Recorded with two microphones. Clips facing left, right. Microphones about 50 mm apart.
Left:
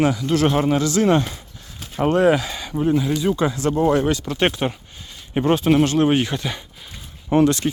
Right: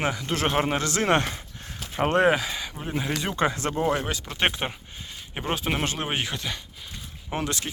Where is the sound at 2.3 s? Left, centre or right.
Centre.